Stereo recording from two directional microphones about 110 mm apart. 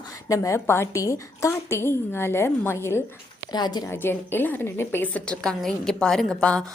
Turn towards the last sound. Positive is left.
turn(degrees=10)  # may be behind; listen again after turning